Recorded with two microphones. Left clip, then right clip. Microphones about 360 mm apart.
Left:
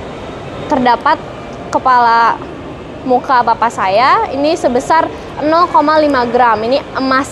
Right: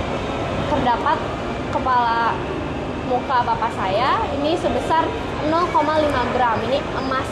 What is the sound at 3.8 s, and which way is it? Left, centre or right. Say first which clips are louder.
A woman's voice: left 10 dB; left.